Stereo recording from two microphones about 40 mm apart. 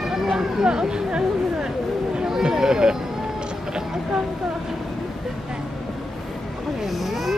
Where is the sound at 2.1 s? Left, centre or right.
Centre.